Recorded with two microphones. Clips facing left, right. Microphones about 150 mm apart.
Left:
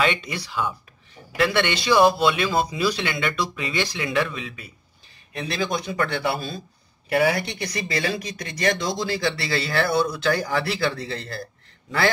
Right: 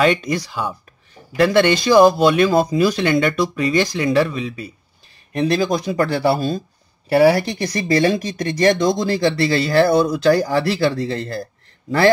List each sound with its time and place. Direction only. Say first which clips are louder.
0.0 s speech: right 7 dB; 45° right (ahead or behind)